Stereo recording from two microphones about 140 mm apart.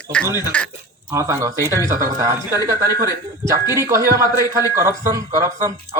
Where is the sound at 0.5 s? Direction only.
10° left (ahead or behind).